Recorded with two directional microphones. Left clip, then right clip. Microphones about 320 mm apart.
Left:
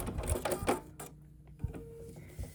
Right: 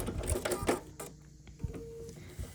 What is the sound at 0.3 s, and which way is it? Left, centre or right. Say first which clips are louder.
Sewing machine: even; centre.